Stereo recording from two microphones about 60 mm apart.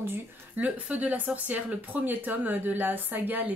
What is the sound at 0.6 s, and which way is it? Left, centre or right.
A woman's voice, right.